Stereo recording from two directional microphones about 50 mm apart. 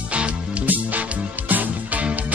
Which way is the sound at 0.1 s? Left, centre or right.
Right.